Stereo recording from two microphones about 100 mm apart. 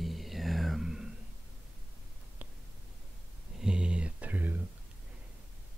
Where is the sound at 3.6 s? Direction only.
10° right (ahead or behind).